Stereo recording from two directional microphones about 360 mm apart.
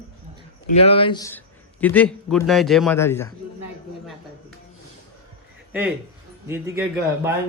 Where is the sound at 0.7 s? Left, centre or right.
Centre.